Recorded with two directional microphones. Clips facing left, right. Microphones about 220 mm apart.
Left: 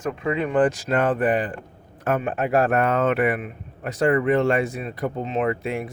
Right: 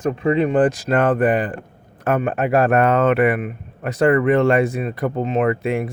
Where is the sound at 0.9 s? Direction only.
55° right (ahead or behind).